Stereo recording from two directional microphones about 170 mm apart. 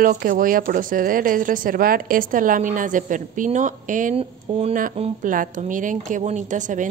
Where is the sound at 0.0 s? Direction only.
55° right (ahead or behind).